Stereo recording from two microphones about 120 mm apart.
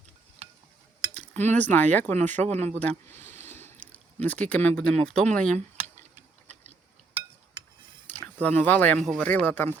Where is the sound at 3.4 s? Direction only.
15° left (ahead or behind).